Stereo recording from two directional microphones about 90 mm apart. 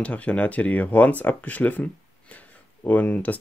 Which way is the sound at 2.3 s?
20° left (ahead or behind).